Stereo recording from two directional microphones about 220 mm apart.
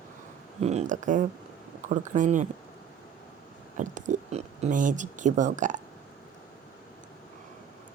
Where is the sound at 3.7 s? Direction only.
35° right (ahead or behind).